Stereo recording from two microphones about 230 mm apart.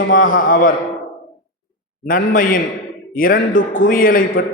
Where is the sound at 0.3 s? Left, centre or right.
Left.